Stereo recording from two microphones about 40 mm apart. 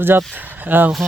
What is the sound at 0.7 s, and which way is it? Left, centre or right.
Speech, right.